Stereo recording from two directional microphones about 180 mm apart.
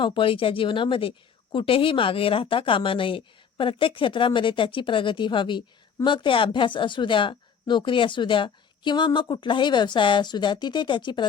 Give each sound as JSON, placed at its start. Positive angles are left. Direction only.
{"t": 0.0, "sound": "speech", "side_deg": 30}